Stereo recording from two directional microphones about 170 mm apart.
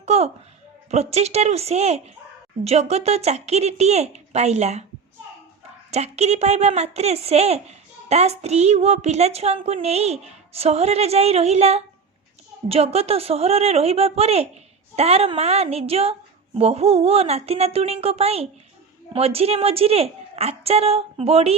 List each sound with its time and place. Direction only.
0.0 s a woman's voice: 40° right (ahead or behind)
5.9 s a woman's voice: 40° right (ahead or behind)